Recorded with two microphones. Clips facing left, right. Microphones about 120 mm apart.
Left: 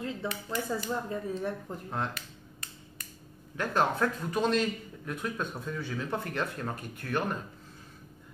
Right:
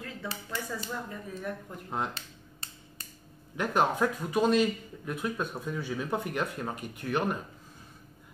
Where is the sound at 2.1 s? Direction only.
30° right (ahead or behind).